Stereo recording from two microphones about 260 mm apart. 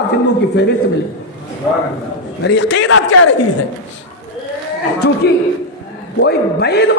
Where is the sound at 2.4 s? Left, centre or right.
Left.